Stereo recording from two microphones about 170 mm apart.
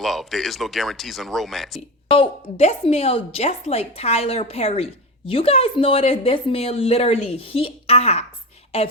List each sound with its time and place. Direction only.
0.0 s speech: centre (ahead or behind)
2.0 s a woman's voice: 30° left (ahead or behind)